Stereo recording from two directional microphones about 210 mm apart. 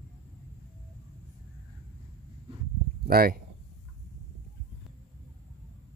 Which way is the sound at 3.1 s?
45° right (ahead or behind).